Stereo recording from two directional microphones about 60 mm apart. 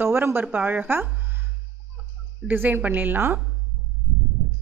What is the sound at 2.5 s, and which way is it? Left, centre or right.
Speech, right.